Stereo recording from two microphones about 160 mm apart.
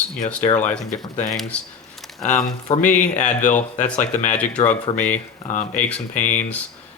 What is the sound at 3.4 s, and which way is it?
Speech, 50° left (ahead or behind).